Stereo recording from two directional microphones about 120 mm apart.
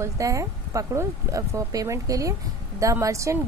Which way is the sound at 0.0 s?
25° right (ahead or behind).